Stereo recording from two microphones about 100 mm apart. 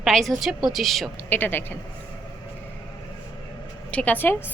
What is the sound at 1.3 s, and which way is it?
Speech, 20° left (ahead or behind).